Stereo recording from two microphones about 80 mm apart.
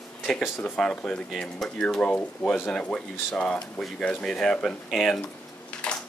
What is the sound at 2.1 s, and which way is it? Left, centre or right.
Speech, centre.